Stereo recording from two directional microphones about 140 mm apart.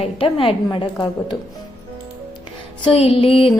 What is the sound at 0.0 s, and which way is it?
A woman's voice, 40° left (ahead or behind).